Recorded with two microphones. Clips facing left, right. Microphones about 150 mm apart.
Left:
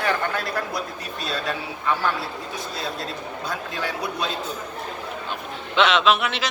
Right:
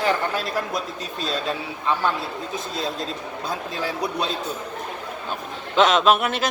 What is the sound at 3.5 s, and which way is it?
Speech, 30° right (ahead or behind).